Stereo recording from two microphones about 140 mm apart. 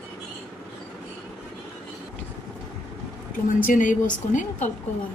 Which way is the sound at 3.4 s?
70° left (ahead or behind).